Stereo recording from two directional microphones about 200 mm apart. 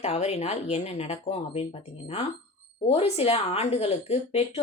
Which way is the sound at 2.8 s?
30° left (ahead or behind).